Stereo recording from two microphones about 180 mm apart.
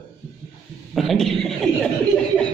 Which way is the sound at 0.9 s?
Centre (ahead or behind).